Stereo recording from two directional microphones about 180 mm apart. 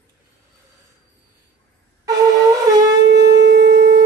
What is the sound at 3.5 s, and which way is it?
Wind instrument, 50° right (ahead or behind).